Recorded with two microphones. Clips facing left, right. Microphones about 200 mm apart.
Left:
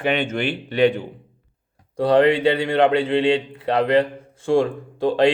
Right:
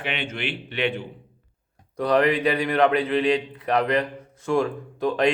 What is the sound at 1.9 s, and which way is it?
Speech, 30° left (ahead or behind).